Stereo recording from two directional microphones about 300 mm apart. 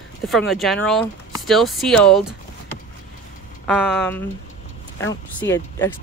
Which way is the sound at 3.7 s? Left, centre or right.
Centre.